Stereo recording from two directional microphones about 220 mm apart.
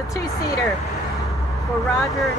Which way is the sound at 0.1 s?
15° left (ahead or behind).